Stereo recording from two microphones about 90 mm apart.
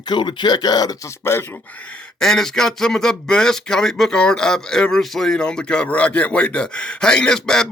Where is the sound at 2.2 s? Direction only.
5° left (ahead or behind).